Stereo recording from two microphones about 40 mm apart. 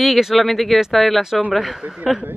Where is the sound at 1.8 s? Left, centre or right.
Right.